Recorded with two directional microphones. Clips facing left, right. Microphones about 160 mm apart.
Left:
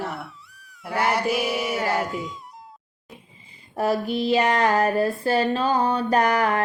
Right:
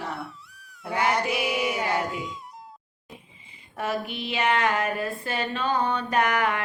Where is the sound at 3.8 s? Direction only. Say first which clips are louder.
Left 7 dB; 35° left (ahead or behind).